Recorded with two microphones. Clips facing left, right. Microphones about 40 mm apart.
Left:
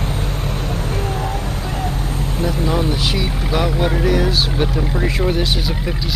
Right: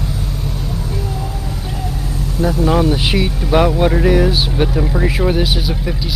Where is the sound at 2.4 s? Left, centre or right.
Right.